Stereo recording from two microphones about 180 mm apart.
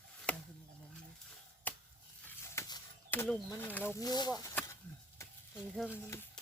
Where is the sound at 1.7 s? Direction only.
10° left (ahead or behind).